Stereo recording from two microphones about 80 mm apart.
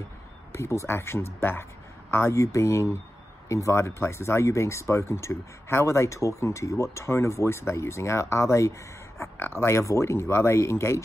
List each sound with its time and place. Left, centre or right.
0.6 s speech: left